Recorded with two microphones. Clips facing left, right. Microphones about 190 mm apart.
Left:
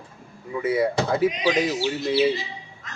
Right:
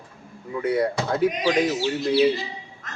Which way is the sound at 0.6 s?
5° left (ahead or behind).